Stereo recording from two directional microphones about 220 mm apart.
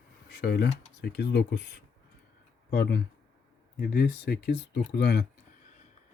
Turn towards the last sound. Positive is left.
turn(degrees=45)  # may be behind; listen again after turning